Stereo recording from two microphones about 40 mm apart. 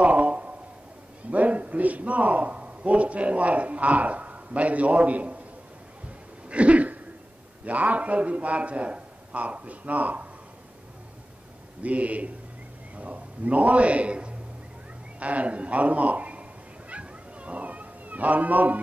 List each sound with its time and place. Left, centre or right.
0.0 s a sound: right
1.3 s a man's voice: right
6.5 s a sound: right
7.6 s a man's voice: right
11.8 s a man's voice: right
16.9 s cat: right